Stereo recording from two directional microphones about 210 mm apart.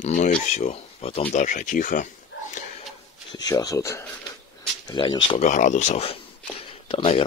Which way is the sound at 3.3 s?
20° left (ahead or behind).